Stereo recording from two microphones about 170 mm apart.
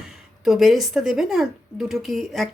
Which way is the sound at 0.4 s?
Centre (ahead or behind).